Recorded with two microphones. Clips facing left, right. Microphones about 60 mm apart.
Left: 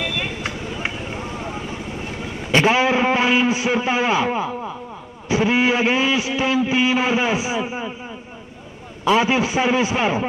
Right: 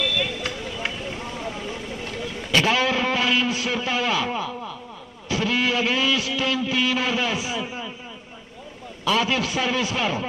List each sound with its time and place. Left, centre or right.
0.0 s a sound: left
2.0 s a man's voice: left
9.0 s a man's voice: left